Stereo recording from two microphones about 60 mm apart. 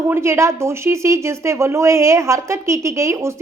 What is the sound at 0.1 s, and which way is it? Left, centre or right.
Speech, right.